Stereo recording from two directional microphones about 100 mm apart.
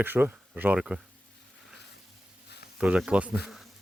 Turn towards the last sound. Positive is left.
turn(degrees=0)  # may be behind; listen again after turning